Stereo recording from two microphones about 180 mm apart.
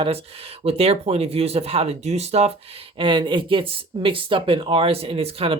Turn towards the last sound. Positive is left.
turn(degrees=-30)  # may be behind; listen again after turning